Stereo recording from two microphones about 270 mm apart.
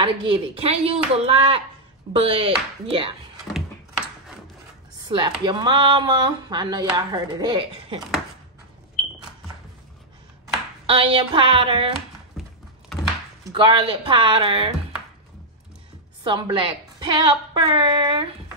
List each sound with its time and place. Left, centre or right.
0.0 s a woman's voice: centre
5.0 s speech: centre
10.9 s a woman's voice: centre
12.4 s a sound: centre
13.4 s speech: centre
16.3 s speech: centre